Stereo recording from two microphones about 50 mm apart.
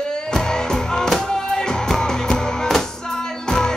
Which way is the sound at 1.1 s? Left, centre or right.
Centre.